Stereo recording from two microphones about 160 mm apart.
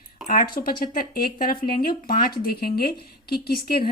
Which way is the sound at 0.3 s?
65° left (ahead or behind).